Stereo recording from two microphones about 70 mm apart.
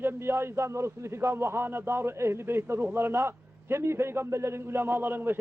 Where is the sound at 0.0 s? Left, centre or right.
Right.